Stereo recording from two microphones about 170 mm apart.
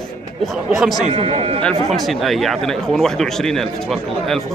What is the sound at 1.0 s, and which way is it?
Speech, 35° right (ahead or behind).